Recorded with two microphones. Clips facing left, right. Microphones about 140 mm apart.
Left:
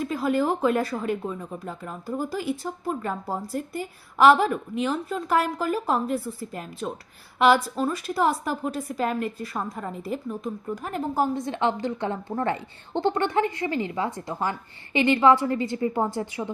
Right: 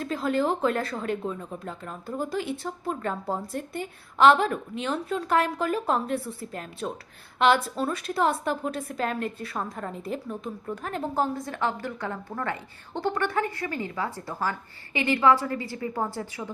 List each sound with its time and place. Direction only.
0.0 s a woman's voice: 5° left (ahead or behind)
11.3 s a woman's voice: 25° left (ahead or behind)